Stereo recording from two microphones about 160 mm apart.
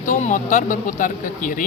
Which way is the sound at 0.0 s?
50° left (ahead or behind).